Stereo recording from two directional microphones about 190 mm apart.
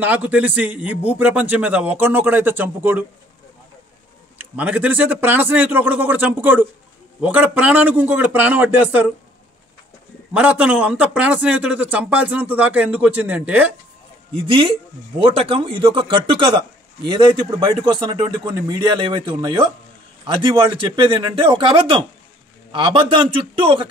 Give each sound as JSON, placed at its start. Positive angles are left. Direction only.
{"t": 0.0, "sound": "a man's voice", "side_deg": -10}
{"t": 4.4, "sound": "a man's voice", "side_deg": -10}
{"t": 10.3, "sound": "a man's voice", "side_deg": -5}
{"t": 14.3, "sound": "a man's voice", "side_deg": -25}